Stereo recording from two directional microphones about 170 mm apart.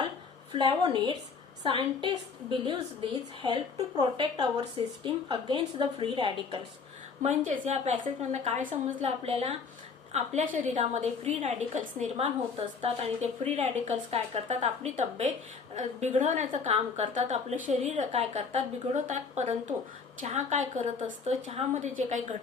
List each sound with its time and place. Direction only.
0.5 s a woman's voice: 25° right (ahead or behind)
7.2 s a woman's voice: 45° right (ahead or behind)